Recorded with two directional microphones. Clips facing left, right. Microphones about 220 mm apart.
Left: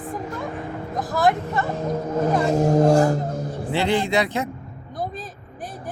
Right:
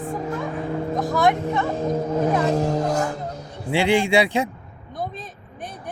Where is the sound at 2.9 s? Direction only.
35° left (ahead or behind).